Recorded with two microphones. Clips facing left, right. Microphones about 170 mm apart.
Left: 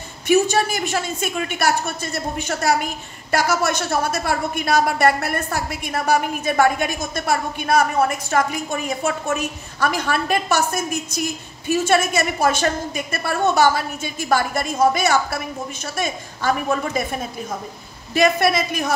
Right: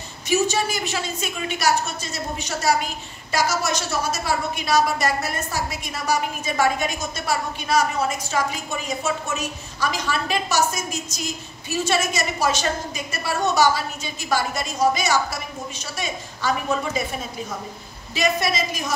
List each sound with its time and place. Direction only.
0.3 s a woman's voice: 55° left (ahead or behind)
18.1 s a woman's voice: 55° left (ahead or behind)